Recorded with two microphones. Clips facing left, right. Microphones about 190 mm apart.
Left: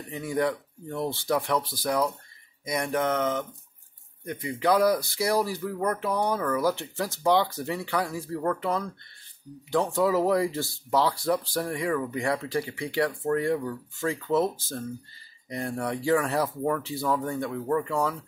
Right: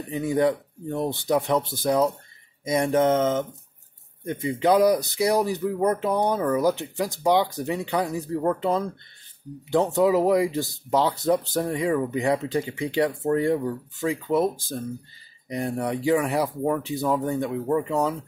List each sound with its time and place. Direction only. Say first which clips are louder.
0.1 s speech: right 5 dB; 20° right (ahead or behind)